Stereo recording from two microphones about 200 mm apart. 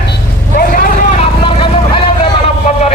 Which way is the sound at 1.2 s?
25° left (ahead or behind).